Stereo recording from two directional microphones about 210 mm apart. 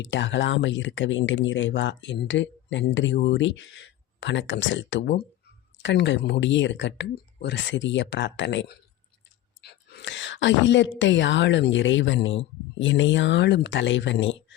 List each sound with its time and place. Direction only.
0.0 s a woman's voice: 60° left (ahead or behind)